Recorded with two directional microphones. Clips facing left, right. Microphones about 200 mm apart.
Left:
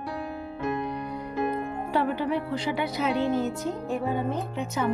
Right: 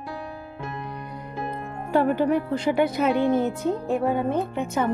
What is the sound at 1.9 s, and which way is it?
Speech, 50° right (ahead or behind).